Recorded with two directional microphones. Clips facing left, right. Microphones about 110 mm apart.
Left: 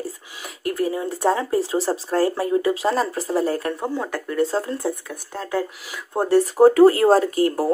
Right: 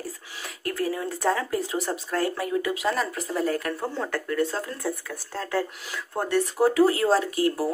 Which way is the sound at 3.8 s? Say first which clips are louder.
Left 3 dB; 15° left (ahead or behind).